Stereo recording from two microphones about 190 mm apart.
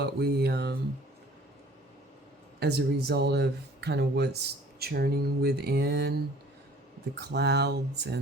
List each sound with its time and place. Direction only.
0.0 s speech: 60° right (ahead or behind)
2.6 s speech: 60° right (ahead or behind)
7.2 s speech: 60° right (ahead or behind)